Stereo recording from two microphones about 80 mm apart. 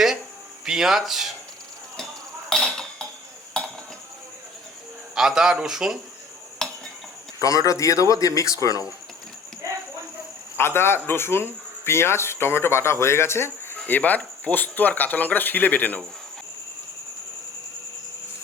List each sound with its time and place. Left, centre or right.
0.6 s a man's voice: centre
2.5 s cutlery: centre
5.1 s a man's voice: centre
6.6 s cutlery: centre
7.4 s speech: left
10.6 s speech: left